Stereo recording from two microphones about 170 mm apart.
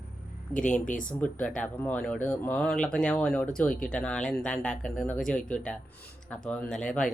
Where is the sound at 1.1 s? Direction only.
5° left (ahead or behind).